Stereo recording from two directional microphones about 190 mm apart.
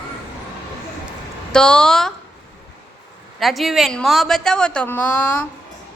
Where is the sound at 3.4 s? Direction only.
Centre (ahead or behind).